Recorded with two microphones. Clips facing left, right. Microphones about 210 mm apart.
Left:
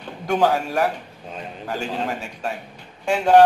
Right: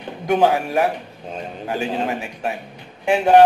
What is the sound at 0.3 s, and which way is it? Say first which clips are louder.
Music: right 3 dB; 20° right (ahead or behind).